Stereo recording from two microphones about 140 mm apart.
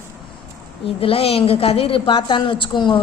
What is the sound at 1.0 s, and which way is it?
A woman's voice, 45° left (ahead or behind).